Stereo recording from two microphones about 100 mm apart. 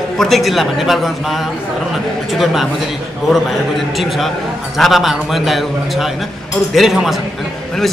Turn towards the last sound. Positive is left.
turn(degrees=0)  # may be behind; listen again after turning